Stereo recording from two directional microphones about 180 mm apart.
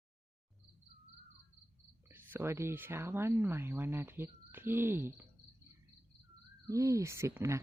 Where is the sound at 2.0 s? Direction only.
10° right (ahead or behind).